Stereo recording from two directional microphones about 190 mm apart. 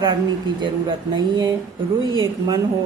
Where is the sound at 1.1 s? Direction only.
25° right (ahead or behind).